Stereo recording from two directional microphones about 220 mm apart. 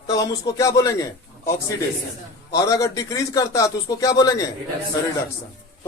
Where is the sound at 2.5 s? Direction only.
15° left (ahead or behind).